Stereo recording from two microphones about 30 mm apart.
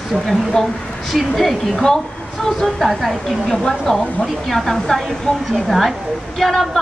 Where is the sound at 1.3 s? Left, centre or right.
Centre.